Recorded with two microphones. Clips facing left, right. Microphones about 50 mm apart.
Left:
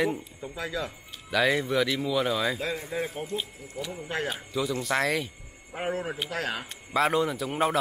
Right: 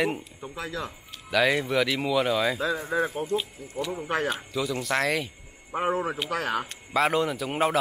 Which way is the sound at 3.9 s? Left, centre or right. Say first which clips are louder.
Right 4 dB; right.